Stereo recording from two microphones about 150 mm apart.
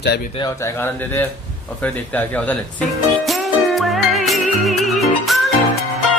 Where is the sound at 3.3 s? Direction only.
Centre (ahead or behind).